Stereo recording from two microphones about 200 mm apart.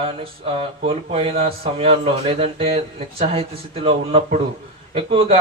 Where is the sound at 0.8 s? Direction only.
30° right (ahead or behind).